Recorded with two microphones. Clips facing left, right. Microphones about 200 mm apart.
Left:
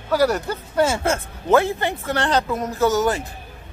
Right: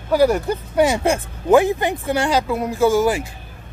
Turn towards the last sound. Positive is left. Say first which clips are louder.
# right 3 dB
turn(degrees=-10)  # may be behind; listen again after turning